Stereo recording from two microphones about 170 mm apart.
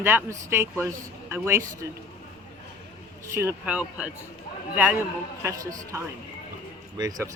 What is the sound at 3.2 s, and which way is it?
Speech, 15° right (ahead or behind).